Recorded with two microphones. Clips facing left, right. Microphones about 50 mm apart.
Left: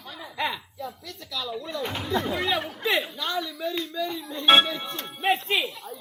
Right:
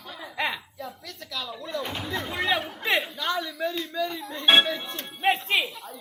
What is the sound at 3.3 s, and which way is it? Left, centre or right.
A woman's voice, right.